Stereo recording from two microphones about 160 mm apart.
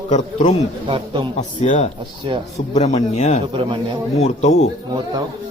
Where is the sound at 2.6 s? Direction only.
45° left (ahead or behind).